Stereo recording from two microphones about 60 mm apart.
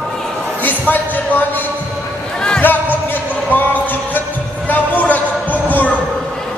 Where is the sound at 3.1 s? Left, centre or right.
Left.